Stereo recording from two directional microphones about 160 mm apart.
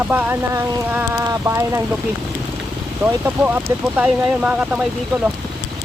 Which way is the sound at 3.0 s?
10° right (ahead or behind).